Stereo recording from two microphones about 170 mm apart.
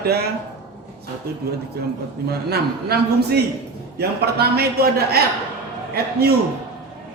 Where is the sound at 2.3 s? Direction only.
70° right (ahead or behind).